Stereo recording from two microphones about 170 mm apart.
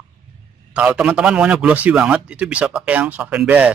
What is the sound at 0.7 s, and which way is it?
A man's voice, 5° right (ahead or behind).